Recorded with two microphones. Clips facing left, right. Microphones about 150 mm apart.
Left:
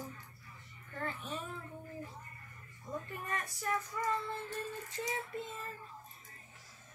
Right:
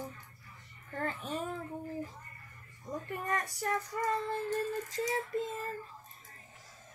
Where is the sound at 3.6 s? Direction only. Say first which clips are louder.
Right 1 dB; 40° right (ahead or behind).